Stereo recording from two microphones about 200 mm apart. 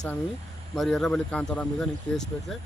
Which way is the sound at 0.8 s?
Centre (ahead or behind).